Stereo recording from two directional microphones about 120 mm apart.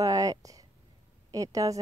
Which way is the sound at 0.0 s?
30° right (ahead or behind).